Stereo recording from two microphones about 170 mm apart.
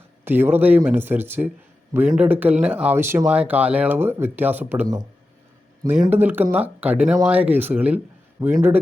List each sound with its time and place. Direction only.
0.3 s speech: 10° right (ahead or behind)
6.1 s speech: 10° right (ahead or behind)